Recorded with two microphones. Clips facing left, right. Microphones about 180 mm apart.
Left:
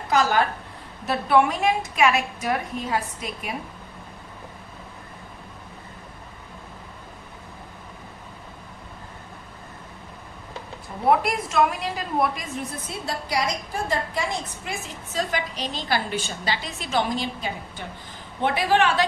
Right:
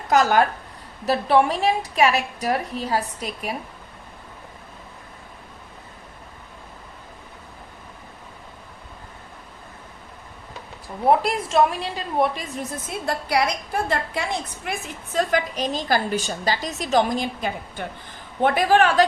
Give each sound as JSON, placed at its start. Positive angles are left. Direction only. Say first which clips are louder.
{"t": 0.1, "sound": "a woman's voice", "louder": "right 3 dB", "side_deg": -50}
{"t": 1.0, "sound": "a woman's voice", "louder": "right 2 dB", "side_deg": -35}
{"t": 11.1, "sound": "a woman's voice", "louder": "right 2 dB", "side_deg": -30}
{"t": 13.1, "sound": "a woman's voice", "louder": "right 4 dB", "side_deg": -60}